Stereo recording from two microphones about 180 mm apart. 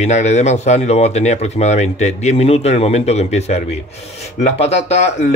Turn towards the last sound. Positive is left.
turn(degrees=35)  # may be behind; listen again after turning